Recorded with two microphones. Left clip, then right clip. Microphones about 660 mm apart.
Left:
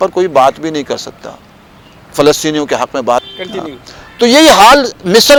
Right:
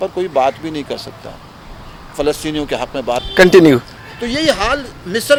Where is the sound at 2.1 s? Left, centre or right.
Left.